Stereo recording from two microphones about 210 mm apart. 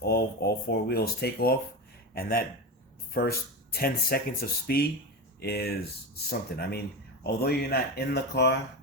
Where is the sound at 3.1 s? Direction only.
45° left (ahead or behind).